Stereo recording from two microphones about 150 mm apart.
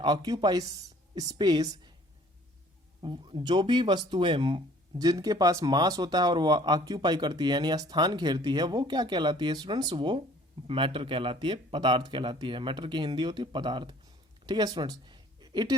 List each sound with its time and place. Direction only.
0.0 s speech: 30° right (ahead or behind)
3.0 s speech: 35° right (ahead or behind)
14.4 s a sound: 30° right (ahead or behind)